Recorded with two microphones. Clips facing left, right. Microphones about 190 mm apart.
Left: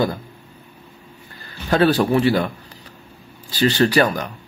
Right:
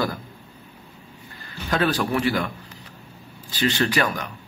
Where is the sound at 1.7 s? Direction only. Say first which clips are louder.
Left 6 dB; 30° left (ahead or behind).